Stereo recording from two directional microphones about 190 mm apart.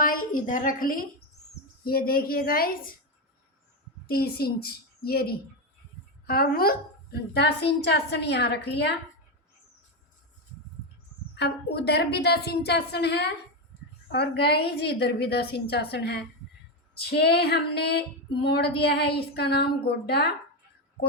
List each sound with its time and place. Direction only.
0.0 s a woman's voice: 50° left (ahead or behind)
4.0 s a woman's voice: 55° left (ahead or behind)
11.3 s a woman's voice: 60° left (ahead or behind)